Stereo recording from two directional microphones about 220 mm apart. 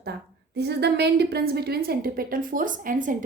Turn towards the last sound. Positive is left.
turn(degrees=-35)  # may be behind; listen again after turning